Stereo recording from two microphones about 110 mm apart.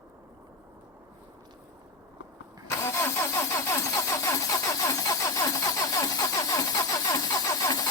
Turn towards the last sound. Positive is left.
turn(degrees=35)  # may be behind; listen again after turning